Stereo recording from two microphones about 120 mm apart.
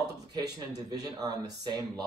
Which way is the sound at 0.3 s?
35° right (ahead or behind).